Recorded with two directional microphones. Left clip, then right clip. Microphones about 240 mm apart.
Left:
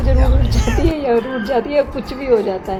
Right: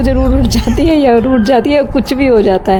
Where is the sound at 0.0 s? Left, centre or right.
Right.